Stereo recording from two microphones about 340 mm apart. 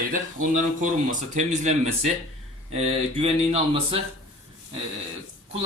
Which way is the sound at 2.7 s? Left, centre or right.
Centre.